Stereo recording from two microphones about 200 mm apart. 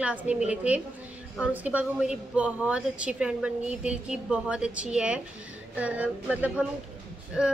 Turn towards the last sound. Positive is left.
turn(degrees=-5)  # may be behind; listen again after turning